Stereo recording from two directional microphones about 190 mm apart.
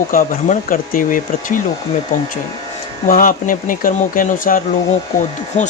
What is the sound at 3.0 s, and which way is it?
Speech, 45° left (ahead or behind).